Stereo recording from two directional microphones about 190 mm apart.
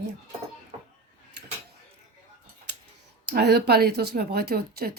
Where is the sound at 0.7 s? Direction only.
30° right (ahead or behind).